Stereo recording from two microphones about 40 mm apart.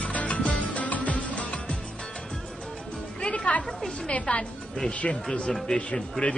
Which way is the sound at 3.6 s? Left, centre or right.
Centre.